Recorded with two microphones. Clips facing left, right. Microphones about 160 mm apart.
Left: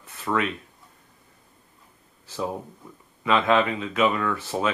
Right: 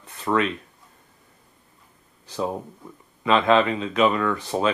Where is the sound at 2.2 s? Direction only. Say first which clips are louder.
Right 3 dB; 15° right (ahead or behind).